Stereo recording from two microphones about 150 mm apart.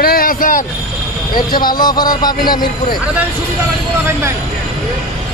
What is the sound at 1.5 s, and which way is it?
Speech, 30° left (ahead or behind).